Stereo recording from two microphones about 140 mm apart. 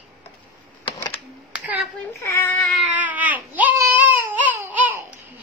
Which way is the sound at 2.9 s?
10° right (ahead or behind).